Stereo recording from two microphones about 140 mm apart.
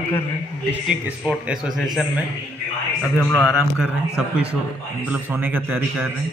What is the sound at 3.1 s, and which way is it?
Speech, 15° left (ahead or behind).